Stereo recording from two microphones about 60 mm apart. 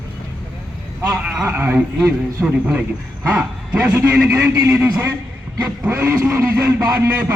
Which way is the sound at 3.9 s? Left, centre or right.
Right.